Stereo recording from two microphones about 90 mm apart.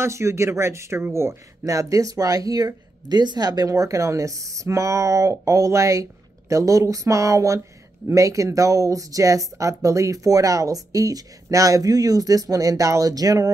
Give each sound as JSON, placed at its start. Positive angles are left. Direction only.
{"t": 0.0, "sound": "speech", "side_deg": -30}